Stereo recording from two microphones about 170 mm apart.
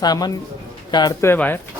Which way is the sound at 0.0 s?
25° left (ahead or behind).